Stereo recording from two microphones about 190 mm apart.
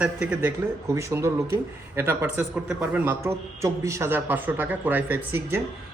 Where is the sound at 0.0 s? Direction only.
5° right (ahead or behind).